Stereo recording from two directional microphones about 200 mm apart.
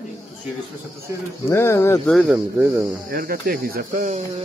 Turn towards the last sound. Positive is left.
turn(degrees=-40)  # may be behind; listen again after turning